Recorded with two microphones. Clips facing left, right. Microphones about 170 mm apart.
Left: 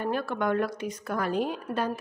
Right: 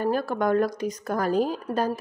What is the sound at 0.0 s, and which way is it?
A woman's voice, 40° right (ahead or behind).